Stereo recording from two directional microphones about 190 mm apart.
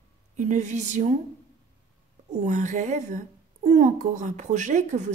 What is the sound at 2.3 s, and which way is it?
A child's voice, 40° right (ahead or behind).